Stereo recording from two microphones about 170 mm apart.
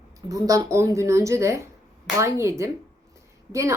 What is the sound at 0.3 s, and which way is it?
A woman's voice, 20° right (ahead or behind).